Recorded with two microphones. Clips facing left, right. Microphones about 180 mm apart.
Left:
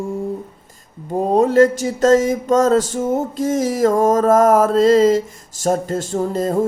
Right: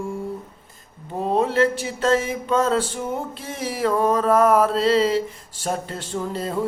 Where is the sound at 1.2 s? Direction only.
40° left (ahead or behind).